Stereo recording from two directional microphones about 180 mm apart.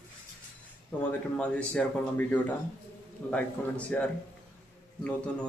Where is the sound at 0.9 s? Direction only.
5° left (ahead or behind).